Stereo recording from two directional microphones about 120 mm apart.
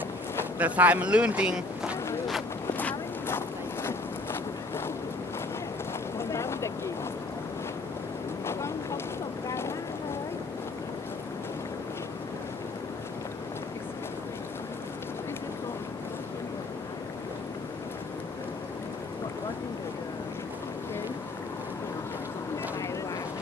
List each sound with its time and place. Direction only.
0.6 s speech: 10° right (ahead or behind)
2.8 s a sound: 15° left (ahead or behind)
6.1 s boat: 20° left (ahead or behind)
8.5 s vehicle: 20° left (ahead or behind)
9.5 s boat: 20° left (ahead or behind)